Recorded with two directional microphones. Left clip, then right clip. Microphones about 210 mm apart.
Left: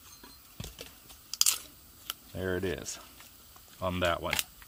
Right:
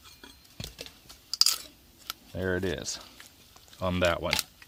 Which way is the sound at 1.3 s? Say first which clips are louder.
Right 4 dB; 5° right (ahead or behind).